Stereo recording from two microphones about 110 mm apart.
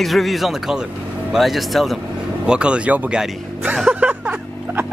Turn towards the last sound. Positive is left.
turn(degrees=-15)  # may be behind; listen again after turning